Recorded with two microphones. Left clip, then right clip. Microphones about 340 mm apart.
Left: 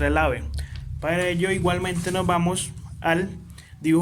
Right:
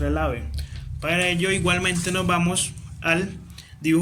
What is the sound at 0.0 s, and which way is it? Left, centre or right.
A man's voice, left.